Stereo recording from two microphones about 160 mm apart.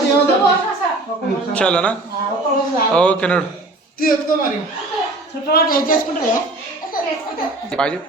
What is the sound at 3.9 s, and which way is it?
Speech, 65° left (ahead or behind).